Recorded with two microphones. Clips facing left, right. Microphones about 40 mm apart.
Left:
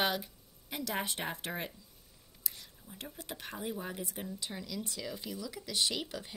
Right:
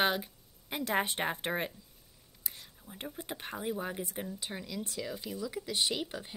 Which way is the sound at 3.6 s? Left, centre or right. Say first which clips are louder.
Right 3 dB; centre.